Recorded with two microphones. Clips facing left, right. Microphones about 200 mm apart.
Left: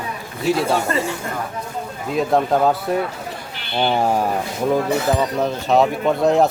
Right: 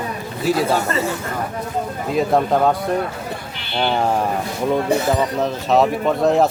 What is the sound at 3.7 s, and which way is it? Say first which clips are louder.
Speech: left 1 dB; 10° left (ahead or behind).